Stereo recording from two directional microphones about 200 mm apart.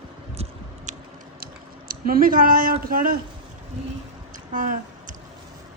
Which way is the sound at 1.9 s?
45° right (ahead or behind).